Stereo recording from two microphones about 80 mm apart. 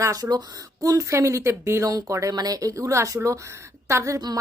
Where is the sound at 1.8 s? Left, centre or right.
Right.